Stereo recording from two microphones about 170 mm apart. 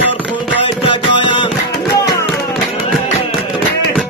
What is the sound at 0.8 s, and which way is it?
Music, 30° left (ahead or behind).